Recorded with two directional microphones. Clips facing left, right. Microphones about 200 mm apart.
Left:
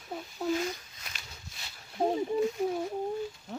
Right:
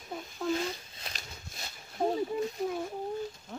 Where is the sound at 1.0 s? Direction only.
40° right (ahead or behind).